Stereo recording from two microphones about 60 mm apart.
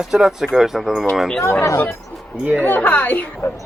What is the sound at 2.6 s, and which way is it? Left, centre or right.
Speech, left.